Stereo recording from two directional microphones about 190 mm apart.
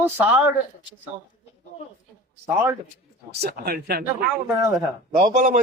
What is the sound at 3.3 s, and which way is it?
Speech, 60° right (ahead or behind).